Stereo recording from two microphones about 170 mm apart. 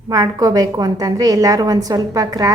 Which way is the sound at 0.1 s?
20° right (ahead or behind).